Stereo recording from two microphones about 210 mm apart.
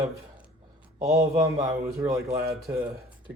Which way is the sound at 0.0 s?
15° right (ahead or behind).